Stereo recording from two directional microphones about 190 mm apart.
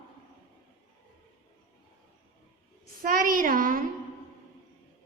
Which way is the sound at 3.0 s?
45° right (ahead or behind).